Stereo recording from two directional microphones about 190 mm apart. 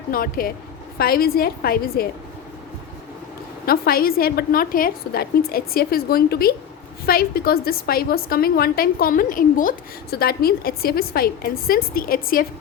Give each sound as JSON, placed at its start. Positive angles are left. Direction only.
{"t": 0.1, "sound": "a woman's voice", "side_deg": 50}
{"t": 3.7, "sound": "a woman's voice", "side_deg": 50}